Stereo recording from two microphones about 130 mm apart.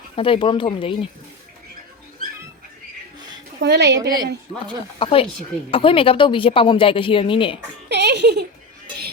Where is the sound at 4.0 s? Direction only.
30° right (ahead or behind).